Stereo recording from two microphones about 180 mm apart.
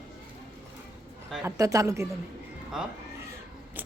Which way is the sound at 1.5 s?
15° right (ahead or behind).